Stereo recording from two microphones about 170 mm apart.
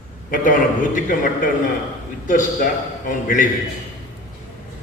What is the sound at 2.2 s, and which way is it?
Speech, 50° left (ahead or behind).